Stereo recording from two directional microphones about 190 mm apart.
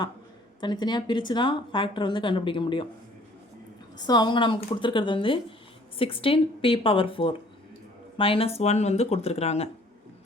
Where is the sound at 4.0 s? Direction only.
20° left (ahead or behind).